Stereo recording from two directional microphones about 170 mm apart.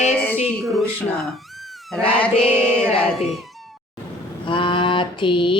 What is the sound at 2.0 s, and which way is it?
Mantra, 5° left (ahead or behind).